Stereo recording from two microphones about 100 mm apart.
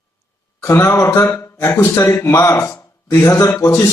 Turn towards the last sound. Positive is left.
turn(degrees=30)  # may be behind; listen again after turning